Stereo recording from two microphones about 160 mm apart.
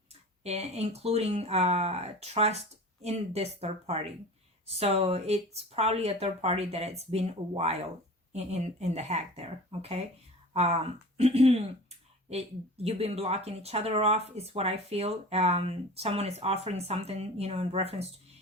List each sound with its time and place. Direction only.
0.4 s speech: 40° right (ahead or behind)